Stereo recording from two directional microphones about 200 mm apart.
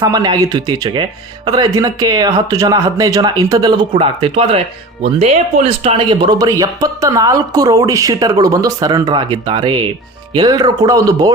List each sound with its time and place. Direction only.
0.0 s speech: 20° right (ahead or behind)